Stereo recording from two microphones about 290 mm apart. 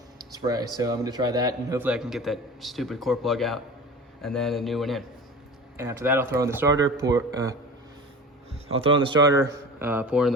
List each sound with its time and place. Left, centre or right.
0.3 s a man's voice: centre
9.0 s a man's voice: centre